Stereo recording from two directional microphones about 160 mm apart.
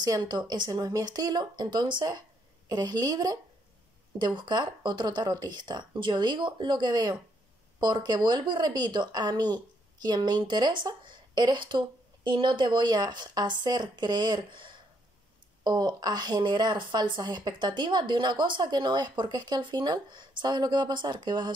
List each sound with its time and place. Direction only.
0.0 s speech: 25° right (ahead or behind)